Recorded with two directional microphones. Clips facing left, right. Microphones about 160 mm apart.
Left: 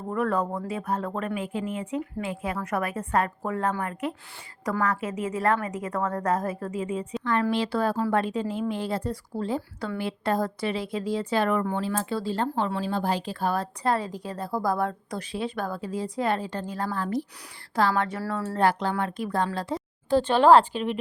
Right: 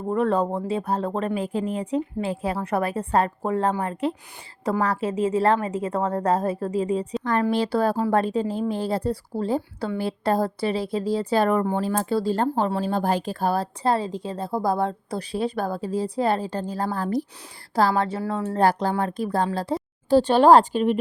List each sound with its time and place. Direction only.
0.1 s a woman's voice: 25° right (ahead or behind)
9.6 s a woman's voice: 20° right (ahead or behind)
10.0 s a woman's voice: 35° right (ahead or behind)
18.2 s a woman's voice: 20° right (ahead or behind)
18.6 s a woman's voice: 35° right (ahead or behind)